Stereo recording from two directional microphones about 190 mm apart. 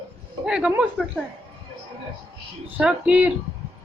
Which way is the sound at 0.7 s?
5° right (ahead or behind).